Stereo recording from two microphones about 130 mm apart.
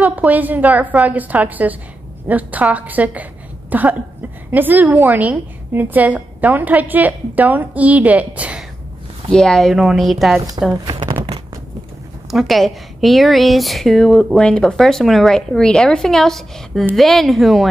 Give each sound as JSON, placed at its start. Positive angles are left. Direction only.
{"t": 0.0, "sound": "a woman's voice", "side_deg": -10}
{"t": 9.3, "sound": "speech", "side_deg": 5}
{"t": 10.9, "sound": "a sound", "side_deg": -35}
{"t": 12.3, "sound": "speech", "side_deg": 0}